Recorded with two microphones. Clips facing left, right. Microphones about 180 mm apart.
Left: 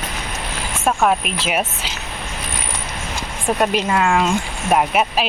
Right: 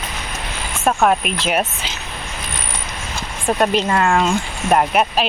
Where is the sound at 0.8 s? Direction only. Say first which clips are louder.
Right 2 dB; centre (ahead or behind).